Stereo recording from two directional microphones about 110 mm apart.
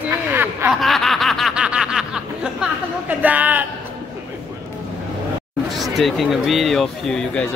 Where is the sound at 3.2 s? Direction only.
15° right (ahead or behind).